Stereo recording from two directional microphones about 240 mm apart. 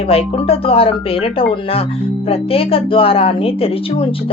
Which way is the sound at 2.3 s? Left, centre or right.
Left.